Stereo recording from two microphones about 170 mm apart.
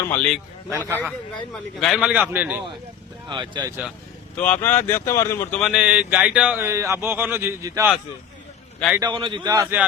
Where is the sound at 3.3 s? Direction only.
25° right (ahead or behind).